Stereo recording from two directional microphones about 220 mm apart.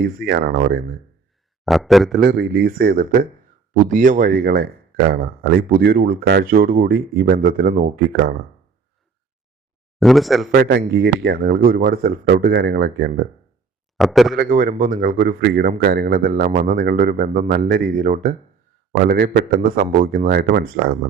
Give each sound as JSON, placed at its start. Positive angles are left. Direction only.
{"t": 0.0, "sound": "speech", "side_deg": -45}
{"t": 1.6, "sound": "speech", "side_deg": 0}
{"t": 2.2, "sound": "speech", "side_deg": -45}
{"t": 10.0, "sound": "speech", "side_deg": 0}
{"t": 10.5, "sound": "speech", "side_deg": -40}
{"t": 14.0, "sound": "speech", "side_deg": 0}
{"t": 14.3, "sound": "speech", "side_deg": -40}